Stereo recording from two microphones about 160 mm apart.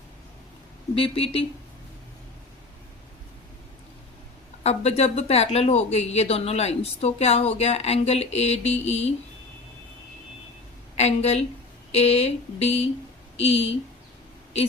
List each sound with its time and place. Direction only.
0.9 s speech: 35° left (ahead or behind)
4.6 s speech: 40° left (ahead or behind)
10.9 s speech: 40° left (ahead or behind)